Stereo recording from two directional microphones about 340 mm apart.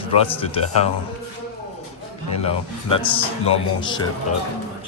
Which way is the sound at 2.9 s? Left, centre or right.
Centre.